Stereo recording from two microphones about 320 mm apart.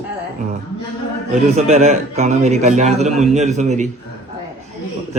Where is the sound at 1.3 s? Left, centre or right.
Centre.